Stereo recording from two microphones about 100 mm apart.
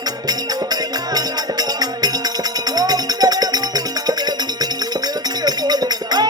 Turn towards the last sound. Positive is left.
turn(degrees=-45)  # may be behind; listen again after turning